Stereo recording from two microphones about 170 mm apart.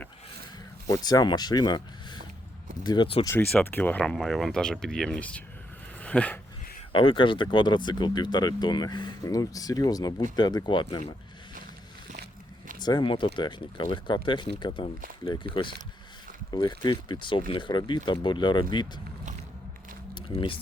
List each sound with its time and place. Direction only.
0.9 s speech: 25° left (ahead or behind)
3.2 s speech: 10° left (ahead or behind)
6.9 s speech: 30° left (ahead or behind)
12.8 s speech: 25° left (ahead or behind)
20.1 s speech: 30° left (ahead or behind)